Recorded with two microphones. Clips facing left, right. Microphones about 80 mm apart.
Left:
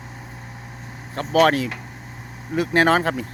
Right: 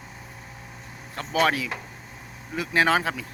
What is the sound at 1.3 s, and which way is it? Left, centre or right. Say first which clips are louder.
Speech: left 6 dB; left.